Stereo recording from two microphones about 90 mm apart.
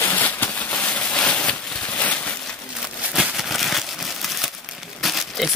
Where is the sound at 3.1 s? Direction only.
Centre (ahead or behind).